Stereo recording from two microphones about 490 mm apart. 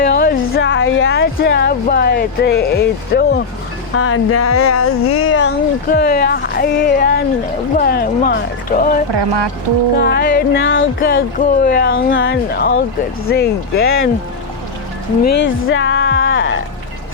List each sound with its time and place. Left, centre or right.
0.0 s a sound: centre
3.9 s speech: left
9.1 s speech: right
10.0 s speech: centre
15.4 s speech: left